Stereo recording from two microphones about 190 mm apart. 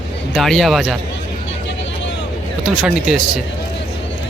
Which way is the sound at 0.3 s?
Centre (ahead or behind).